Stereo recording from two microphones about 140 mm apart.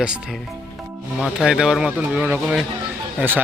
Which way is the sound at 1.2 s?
5° right (ahead or behind).